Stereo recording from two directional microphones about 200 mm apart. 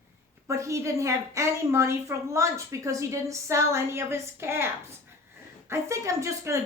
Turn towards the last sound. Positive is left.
turn(degrees=-15)  # may be behind; listen again after turning